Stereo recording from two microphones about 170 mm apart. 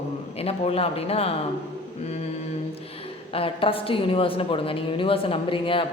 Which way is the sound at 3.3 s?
35° left (ahead or behind).